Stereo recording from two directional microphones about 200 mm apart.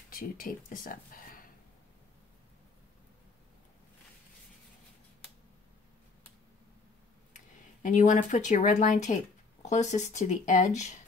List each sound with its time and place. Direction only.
0.1 s speech: 45° left (ahead or behind)
7.3 s speech: 40° left (ahead or behind)